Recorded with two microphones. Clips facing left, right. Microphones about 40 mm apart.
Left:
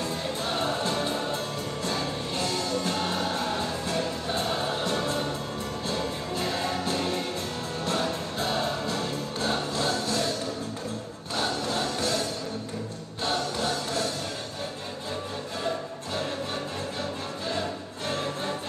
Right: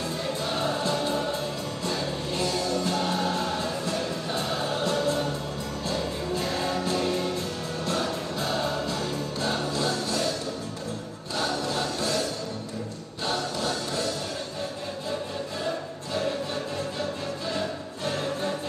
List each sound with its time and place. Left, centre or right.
0.5 s music: left
3.1 s music: left
5.9 s music: left
9.8 s music: left
11.3 s music: left
13.2 s music: left